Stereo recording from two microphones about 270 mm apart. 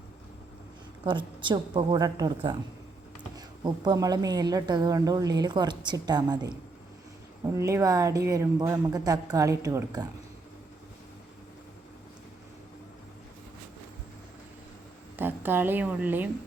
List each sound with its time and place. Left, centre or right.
1.0 s a woman's voice: centre
7.5 s a woman's voice: centre
15.1 s a woman's voice: centre